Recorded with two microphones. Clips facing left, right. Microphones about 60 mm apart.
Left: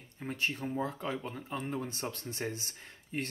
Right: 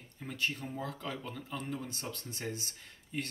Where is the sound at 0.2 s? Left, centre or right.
Left.